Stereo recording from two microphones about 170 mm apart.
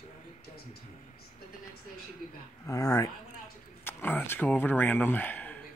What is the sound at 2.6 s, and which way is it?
Speech, 20° left (ahead or behind).